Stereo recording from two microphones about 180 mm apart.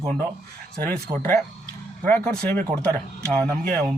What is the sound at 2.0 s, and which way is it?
Speech, 5° left (ahead or behind).